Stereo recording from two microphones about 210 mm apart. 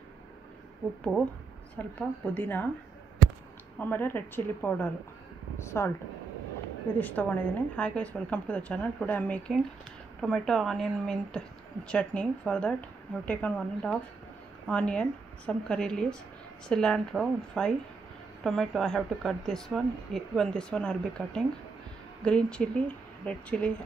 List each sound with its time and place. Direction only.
1.8 s speech: 10° left (ahead or behind)
3.7 s speech: 10° left (ahead or behind)
7.0 s speech: 10° left (ahead or behind)